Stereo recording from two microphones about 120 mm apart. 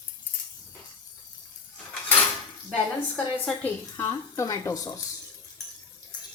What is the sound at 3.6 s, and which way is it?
Speech, 20° left (ahead or behind).